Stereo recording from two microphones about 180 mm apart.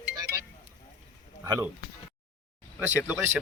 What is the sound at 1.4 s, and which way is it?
Speech, 20° right (ahead or behind).